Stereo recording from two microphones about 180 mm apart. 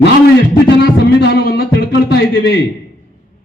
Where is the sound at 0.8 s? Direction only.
65° left (ahead or behind).